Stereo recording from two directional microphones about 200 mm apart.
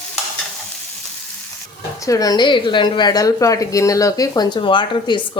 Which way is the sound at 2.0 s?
15° left (ahead or behind).